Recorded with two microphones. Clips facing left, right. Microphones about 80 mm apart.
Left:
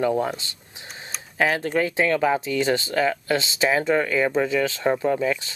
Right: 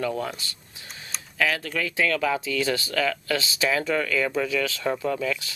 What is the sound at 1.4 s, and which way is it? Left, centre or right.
Speech, left.